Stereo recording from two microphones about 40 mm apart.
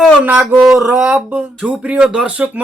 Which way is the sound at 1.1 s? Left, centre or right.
Right.